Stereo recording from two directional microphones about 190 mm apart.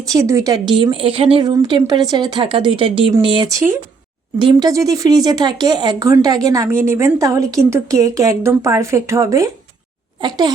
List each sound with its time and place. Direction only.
0.1 s speech: 15° right (ahead or behind)